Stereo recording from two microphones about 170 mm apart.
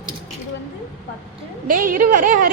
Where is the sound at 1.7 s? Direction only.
55° right (ahead or behind).